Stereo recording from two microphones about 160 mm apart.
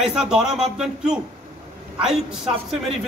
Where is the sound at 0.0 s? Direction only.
5° right (ahead or behind).